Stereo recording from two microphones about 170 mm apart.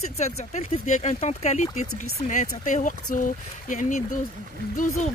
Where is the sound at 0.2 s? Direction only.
45° left (ahead or behind).